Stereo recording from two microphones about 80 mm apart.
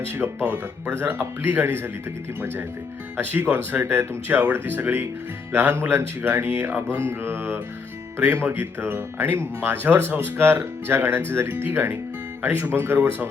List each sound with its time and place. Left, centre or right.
0.2 s speech: right
3.2 s speech: right